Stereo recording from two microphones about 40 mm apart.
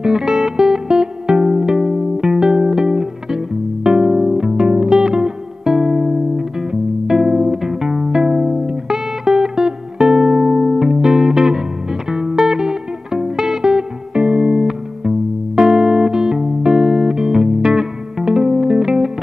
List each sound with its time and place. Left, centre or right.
0.0 s music: centre